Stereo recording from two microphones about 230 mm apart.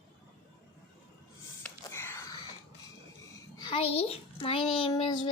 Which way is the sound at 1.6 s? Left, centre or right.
Centre.